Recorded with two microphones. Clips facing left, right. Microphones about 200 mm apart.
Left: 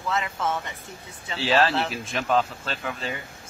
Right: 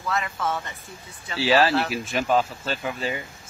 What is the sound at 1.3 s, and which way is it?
Speech, 5° right (ahead or behind).